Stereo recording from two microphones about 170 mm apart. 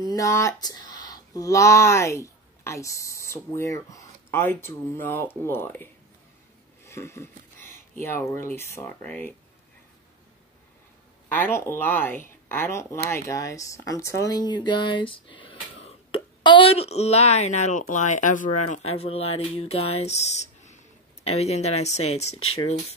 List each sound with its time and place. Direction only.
0.0 s speech: 20° left (ahead or behind)
11.3 s speech: 15° left (ahead or behind); by 22.4 s 40° left (ahead or behind)